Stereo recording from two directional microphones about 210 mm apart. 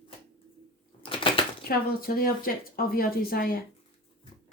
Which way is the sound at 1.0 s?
25° left (ahead or behind).